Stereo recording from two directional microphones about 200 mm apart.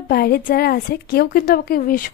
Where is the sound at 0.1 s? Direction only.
50° left (ahead or behind).